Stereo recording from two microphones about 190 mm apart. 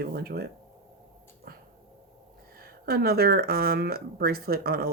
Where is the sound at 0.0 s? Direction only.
55° right (ahead or behind).